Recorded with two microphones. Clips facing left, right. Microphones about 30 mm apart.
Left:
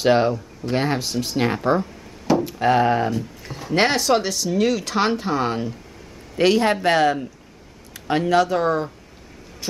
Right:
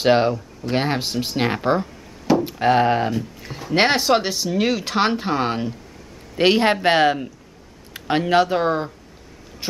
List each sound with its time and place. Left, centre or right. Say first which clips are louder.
0.0 s speech: right 1 dB; centre
3.2 s speech: right 1 dB; centre
3.7 s speech: right 1 dB; right
8.3 s speech: right 1 dB; right